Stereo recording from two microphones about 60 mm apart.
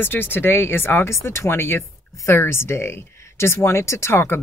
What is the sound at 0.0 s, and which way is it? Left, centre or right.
Speech, left.